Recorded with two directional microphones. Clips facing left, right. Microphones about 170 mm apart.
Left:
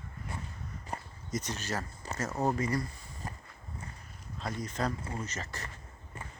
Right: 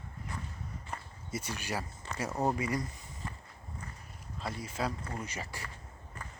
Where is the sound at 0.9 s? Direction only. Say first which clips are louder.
Left 3 dB; 35° left (ahead or behind).